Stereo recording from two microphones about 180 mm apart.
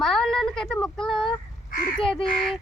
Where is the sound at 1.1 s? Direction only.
30° left (ahead or behind).